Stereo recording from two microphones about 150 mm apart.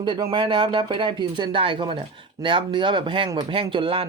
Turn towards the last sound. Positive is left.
turn(degrees=-35)  # may be behind; listen again after turning